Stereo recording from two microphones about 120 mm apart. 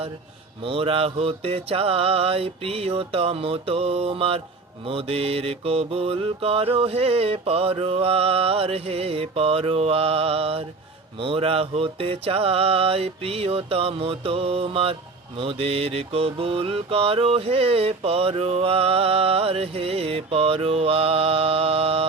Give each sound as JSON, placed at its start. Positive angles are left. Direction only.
{"t": 0.6, "sound": "mantra", "side_deg": -50}